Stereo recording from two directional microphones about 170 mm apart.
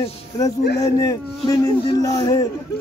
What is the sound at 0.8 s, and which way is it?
Speech, 20° left (ahead or behind).